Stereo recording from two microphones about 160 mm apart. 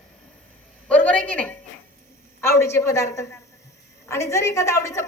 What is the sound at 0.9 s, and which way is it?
A woman's voice, 10° left (ahead or behind).